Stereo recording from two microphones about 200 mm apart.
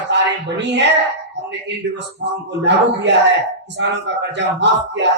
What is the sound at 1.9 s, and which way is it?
Speech, 60° right (ahead or behind).